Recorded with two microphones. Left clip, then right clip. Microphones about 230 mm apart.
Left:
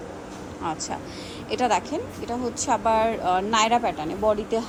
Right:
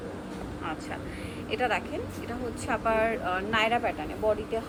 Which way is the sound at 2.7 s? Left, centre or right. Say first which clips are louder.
Left 5 dB; left.